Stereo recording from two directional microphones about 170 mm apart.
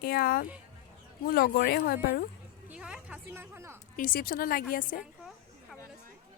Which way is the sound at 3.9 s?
55° left (ahead or behind).